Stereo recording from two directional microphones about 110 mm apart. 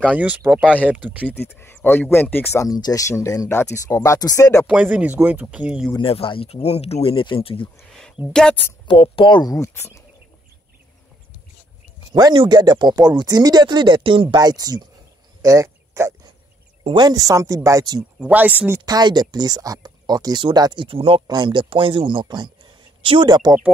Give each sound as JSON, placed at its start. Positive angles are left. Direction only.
{"t": 0.1, "sound": "speech", "side_deg": -15}
{"t": 1.2, "sound": "speech", "side_deg": 20}
{"t": 2.6, "sound": "speech", "side_deg": 35}
{"t": 4.6, "sound": "speech", "side_deg": -10}
{"t": 5.9, "sound": "speech", "side_deg": 55}
{"t": 8.3, "sound": "speech", "side_deg": 5}
{"t": 8.8, "sound": "speech", "side_deg": 55}
{"t": 9.5, "sound": "speech", "side_deg": 25}
{"t": 12.1, "sound": "speech", "side_deg": -35}
{"t": 15.4, "sound": "a sound", "side_deg": -30}
{"t": 16.8, "sound": "speech", "side_deg": -40}
{"t": 18.2, "sound": "speech", "side_deg": -15}
{"t": 18.9, "sound": "speech", "side_deg": -40}
{"t": 21.3, "sound": "speech", "side_deg": -45}